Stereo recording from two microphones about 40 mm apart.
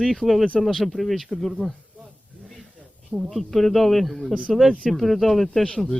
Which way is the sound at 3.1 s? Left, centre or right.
Centre.